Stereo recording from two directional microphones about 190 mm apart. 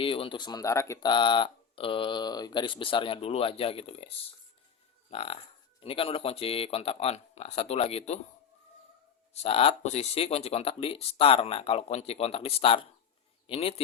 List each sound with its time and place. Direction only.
0.0 s speech: 25° left (ahead or behind)
5.1 s speech: 30° left (ahead or behind)
9.3 s speech: 30° left (ahead or behind)